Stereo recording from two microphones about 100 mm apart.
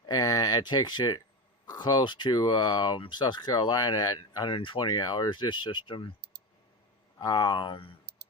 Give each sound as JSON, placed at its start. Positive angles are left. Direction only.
{"t": 0.0, "sound": "a sound", "side_deg": 40}
{"t": 1.6, "sound": "speech", "side_deg": 45}
{"t": 7.2, "sound": "speech", "side_deg": 45}